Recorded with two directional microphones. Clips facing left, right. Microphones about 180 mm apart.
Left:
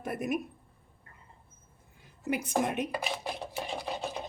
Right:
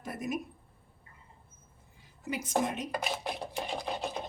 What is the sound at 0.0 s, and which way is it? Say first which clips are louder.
Stir: left 4 dB; 60° left (ahead or behind).